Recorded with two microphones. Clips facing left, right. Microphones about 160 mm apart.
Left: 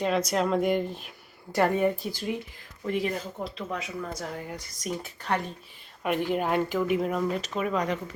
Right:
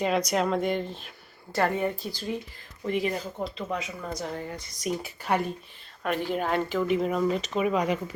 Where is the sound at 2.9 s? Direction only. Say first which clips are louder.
Right 1 dB; centre (ahead or behind).